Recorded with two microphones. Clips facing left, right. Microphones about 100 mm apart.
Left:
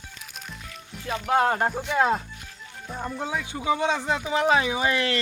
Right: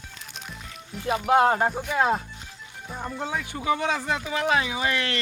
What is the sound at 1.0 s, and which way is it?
Speech, 20° right (ahead or behind).